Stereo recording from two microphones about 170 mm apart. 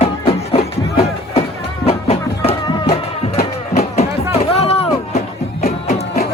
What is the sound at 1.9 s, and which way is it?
Music, 35° left (ahead or behind).